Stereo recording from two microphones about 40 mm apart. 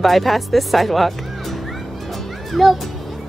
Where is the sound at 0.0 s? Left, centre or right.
Centre.